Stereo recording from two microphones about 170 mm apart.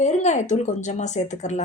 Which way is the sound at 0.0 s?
45° left (ahead or behind).